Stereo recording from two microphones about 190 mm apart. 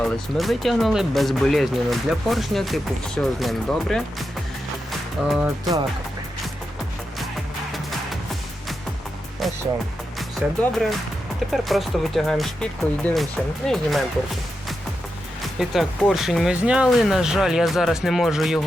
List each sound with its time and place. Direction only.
0.0 s speech: centre (ahead or behind)
4.9 s music: centre (ahead or behind)
5.5 s speech: 15° right (ahead or behind)
7.7 s music: centre (ahead or behind)
9.4 s music: centre (ahead or behind)
10.2 s speech: centre (ahead or behind)
15.5 s speech: centre (ahead or behind)